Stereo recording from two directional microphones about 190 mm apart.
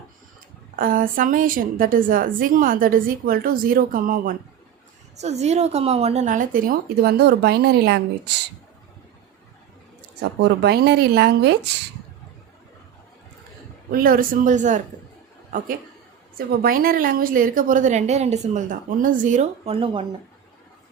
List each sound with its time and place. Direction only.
0.8 s a woman's voice: 45° right (ahead or behind)
5.1 s a woman's voice: 35° right (ahead or behind); by 8.3 s 60° right (ahead or behind)
10.4 s speech: 60° right (ahead or behind)
13.9 s a woman's voice: 50° right (ahead or behind); by 20.1 s 30° right (ahead or behind)